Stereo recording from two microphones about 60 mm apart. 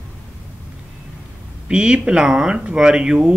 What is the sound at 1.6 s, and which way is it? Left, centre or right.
Speech, centre.